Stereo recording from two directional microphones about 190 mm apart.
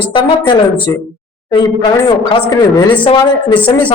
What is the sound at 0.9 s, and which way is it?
Speech, 15° left (ahead or behind).